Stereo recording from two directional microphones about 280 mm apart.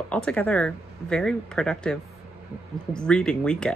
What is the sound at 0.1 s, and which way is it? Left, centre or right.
Speech, centre.